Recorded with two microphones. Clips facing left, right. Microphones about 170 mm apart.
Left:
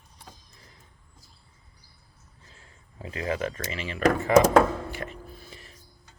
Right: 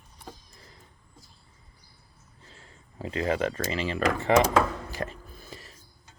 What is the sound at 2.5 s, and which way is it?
Speech, 35° right (ahead or behind).